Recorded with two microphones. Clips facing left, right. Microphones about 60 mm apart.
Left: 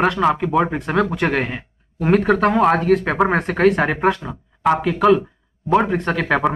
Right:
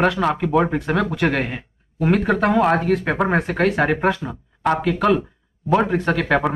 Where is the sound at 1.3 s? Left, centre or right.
Left.